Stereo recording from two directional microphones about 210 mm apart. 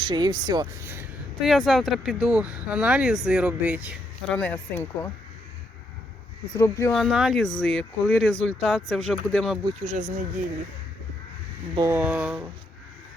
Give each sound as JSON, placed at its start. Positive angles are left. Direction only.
{"t": 0.0, "sound": "speech", "side_deg": -20}
{"t": 1.5, "sound": "speech", "side_deg": 0}
{"t": 4.3, "sound": "speech", "side_deg": 5}
{"t": 6.5, "sound": "speech", "side_deg": 15}
{"t": 6.9, "sound": "speech", "side_deg": 0}
{"t": 9.6, "sound": "speech", "side_deg": -30}
{"t": 11.7, "sound": "speech", "side_deg": -20}
{"t": 11.9, "sound": "speech", "side_deg": -5}